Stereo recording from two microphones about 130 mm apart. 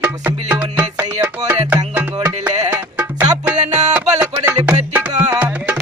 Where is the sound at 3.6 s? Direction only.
65° right (ahead or behind).